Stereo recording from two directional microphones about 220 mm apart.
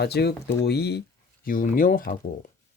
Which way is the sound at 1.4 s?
40° left (ahead or behind).